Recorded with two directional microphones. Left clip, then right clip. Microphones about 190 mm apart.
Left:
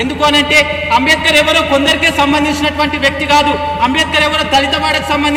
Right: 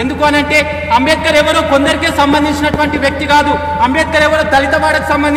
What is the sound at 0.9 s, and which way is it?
A man's voice, 5° right (ahead or behind).